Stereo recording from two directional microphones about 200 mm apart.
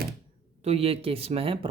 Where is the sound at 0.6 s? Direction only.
30° right (ahead or behind).